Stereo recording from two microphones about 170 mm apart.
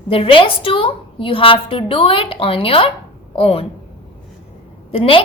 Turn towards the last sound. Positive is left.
turn(degrees=30)  # may be behind; listen again after turning